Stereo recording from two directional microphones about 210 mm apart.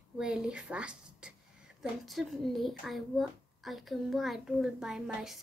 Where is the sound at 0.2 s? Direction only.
5° right (ahead or behind).